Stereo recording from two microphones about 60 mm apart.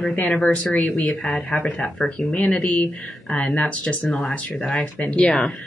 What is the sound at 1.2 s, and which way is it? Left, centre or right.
Speech, centre.